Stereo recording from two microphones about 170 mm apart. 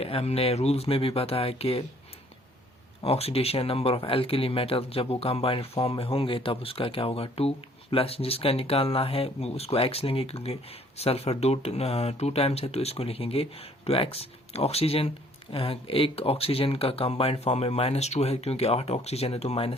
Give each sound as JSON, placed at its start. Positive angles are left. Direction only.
{"t": 0.0, "sound": "speech", "side_deg": 35}
{"t": 3.0, "sound": "speech", "side_deg": 35}